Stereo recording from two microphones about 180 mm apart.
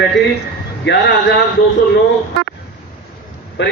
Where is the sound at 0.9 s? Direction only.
85° left.